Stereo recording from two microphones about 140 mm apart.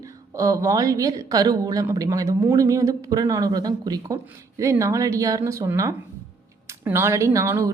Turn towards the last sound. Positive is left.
turn(degrees=-20)  # may be behind; listen again after turning